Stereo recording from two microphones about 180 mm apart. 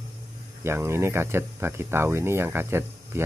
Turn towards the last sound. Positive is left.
turn(degrees=-15)  # may be behind; listen again after turning